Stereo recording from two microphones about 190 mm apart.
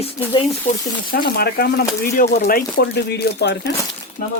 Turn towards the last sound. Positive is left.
turn(degrees=60)  # may be behind; listen again after turning